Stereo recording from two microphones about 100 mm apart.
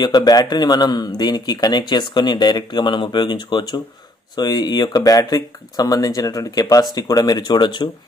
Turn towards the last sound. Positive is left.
turn(degrees=50)  # may be behind; listen again after turning